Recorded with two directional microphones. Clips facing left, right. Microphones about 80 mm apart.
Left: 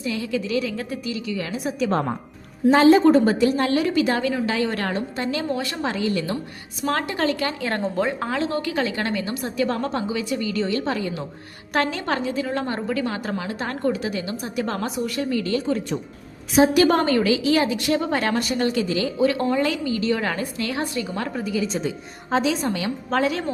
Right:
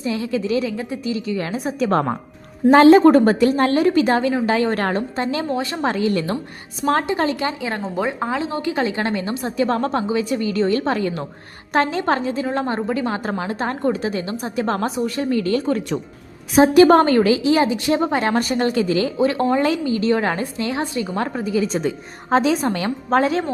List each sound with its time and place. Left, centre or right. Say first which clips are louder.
0.0 s a woman's voice: right 3 dB; right
1.9 s a woman's voice: right 5 dB; right
2.9 s a woman's voice: right 4 dB; right
3.5 s a woman's voice: right 4 dB; right
5.8 s a woman's voice: right 6 dB; right
6.8 s a woman's voice: right 4 dB; right
7.6 s a woman's voice: even; centre; by 11.3 s right
11.7 s a woman's voice: right 5 dB; right
18.3 s a woman's voice: right 3 dB; right